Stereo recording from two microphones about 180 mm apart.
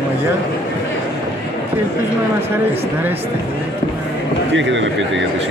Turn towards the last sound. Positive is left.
turn(degrees=-90)